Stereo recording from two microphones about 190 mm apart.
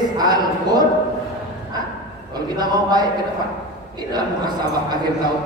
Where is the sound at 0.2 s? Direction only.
20° right (ahead or behind).